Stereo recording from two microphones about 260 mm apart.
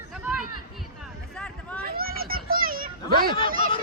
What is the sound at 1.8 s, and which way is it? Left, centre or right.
Children playing, right.